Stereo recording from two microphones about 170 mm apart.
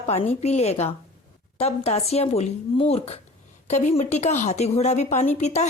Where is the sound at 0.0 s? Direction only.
35° left (ahead or behind).